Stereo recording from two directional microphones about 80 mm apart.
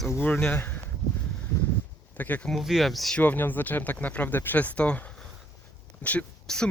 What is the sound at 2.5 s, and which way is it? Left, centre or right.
Speech, centre.